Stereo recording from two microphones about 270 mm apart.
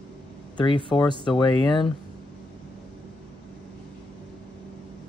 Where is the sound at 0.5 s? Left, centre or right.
Centre.